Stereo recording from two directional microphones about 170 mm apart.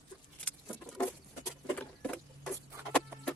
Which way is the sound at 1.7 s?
5° left (ahead or behind).